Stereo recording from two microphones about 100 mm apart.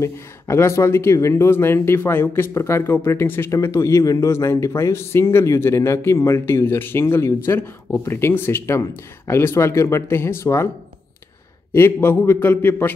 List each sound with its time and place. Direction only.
0.0 s speech: 30° left (ahead or behind)
11.7 s speech: 25° left (ahead or behind)